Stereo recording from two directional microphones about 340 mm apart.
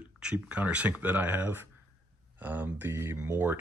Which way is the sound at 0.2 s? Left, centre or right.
Centre.